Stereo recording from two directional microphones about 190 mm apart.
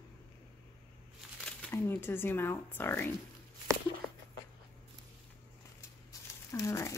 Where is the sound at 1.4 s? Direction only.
10° left (ahead or behind).